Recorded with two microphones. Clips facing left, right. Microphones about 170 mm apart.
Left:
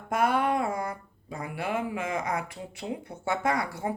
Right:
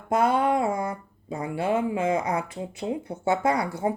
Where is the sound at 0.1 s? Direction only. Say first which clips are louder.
Right 4 dB; 25° right (ahead or behind).